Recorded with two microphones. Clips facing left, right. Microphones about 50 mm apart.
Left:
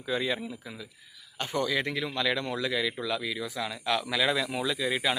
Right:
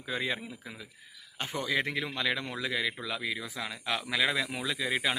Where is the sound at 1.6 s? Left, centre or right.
Right.